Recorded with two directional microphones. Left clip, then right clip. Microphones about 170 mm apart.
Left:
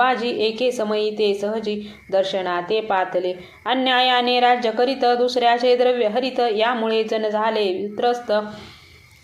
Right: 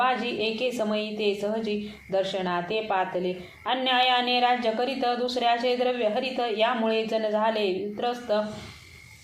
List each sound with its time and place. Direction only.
0.0 s a woman's voice: 30° left (ahead or behind)